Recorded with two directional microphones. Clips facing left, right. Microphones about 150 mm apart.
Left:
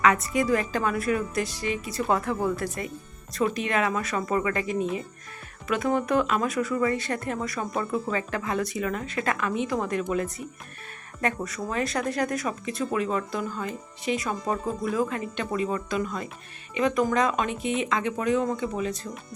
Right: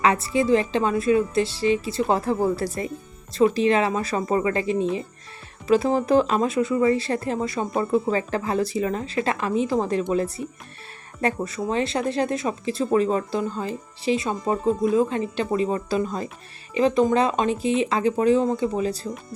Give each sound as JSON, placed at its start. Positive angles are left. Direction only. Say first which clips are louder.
{"t": 0.0, "sound": "speech", "louder": "right 2 dB", "side_deg": -30}